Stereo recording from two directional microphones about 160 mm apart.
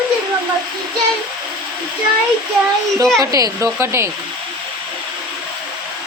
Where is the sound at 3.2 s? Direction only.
25° right (ahead or behind).